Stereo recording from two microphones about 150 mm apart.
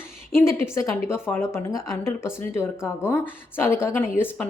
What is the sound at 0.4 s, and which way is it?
Speech, 20° left (ahead or behind).